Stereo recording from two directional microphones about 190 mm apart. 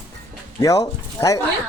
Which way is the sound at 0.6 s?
20° left (ahead or behind).